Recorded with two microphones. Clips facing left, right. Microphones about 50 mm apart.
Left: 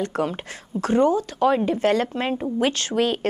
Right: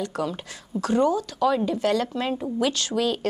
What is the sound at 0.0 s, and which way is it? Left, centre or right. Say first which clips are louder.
Speech: left 3 dB; left.